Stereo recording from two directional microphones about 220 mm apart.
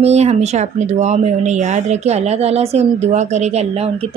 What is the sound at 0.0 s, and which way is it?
Speech, 30° right (ahead or behind).